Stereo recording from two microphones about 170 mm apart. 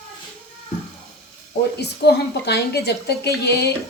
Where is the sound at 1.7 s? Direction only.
75° left (ahead or behind).